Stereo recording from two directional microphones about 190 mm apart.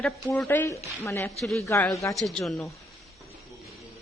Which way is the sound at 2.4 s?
Centre (ahead or behind).